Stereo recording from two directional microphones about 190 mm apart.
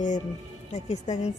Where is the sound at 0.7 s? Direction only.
35° left (ahead or behind).